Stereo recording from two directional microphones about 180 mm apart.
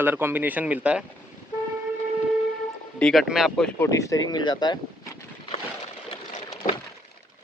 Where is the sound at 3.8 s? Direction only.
20° left (ahead or behind).